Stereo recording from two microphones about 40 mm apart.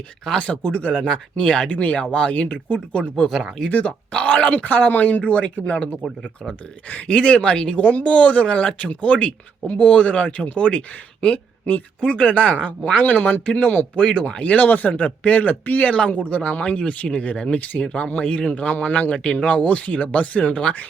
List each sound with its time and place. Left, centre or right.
0.3 s speech: left
1.0 s speech: centre
1.6 s speech: left
4.5 s speech: left
5.6 s speech: left
7.1 s speech: left
15.9 s speech: left
18.4 s speech: left